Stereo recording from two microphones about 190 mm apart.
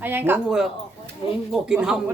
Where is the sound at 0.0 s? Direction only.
10° right (ahead or behind).